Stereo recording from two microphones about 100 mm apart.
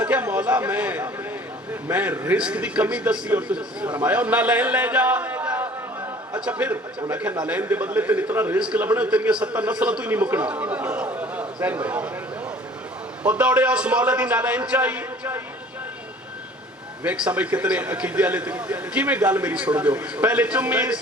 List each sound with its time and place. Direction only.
0.0 s a sound: 15° right (ahead or behind)
1.9 s a man's voice: 20° right (ahead or behind)
13.2 s a man's voice: 15° right (ahead or behind)
17.0 s a man's voice: 15° right (ahead or behind)